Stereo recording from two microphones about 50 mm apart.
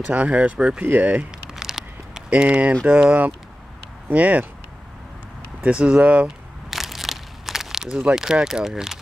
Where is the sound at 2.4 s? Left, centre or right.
Right.